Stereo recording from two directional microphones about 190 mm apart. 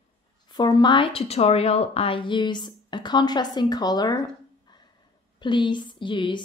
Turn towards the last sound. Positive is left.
turn(degrees=25)  # may be behind; listen again after turning